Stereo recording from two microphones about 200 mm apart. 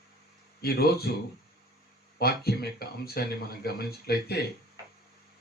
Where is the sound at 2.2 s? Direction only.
50° left (ahead or behind).